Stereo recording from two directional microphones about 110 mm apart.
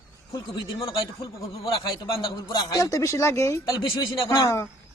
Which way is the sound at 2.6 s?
35° left (ahead or behind).